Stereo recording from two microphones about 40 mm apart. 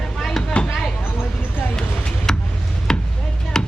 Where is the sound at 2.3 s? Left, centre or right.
Centre.